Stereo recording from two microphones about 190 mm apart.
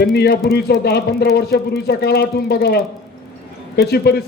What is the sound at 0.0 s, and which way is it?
Speech, 55° left (ahead or behind).